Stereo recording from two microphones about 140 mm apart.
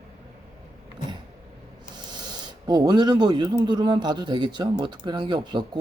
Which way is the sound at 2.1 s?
30° right (ahead or behind).